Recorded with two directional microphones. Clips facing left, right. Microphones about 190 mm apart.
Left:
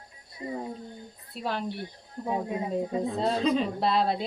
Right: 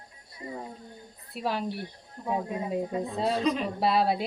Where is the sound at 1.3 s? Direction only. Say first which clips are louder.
Right 2 dB; 5° right (ahead or behind).